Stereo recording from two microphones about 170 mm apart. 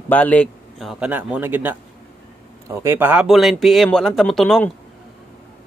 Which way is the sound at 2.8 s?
15° right (ahead or behind).